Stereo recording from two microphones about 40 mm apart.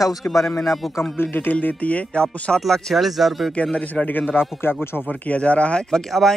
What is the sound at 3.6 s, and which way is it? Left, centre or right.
Speech, left.